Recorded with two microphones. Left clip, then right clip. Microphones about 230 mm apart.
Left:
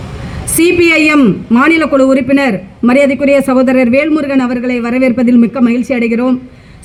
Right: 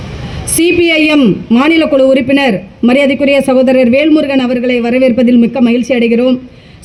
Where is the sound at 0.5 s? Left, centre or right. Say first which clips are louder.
Left 1 dB; right.